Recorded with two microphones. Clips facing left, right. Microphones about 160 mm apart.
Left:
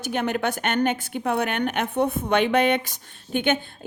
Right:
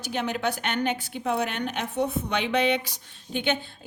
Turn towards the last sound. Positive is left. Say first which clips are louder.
# left 4 dB
turn(degrees=50)  # may be behind; listen again after turning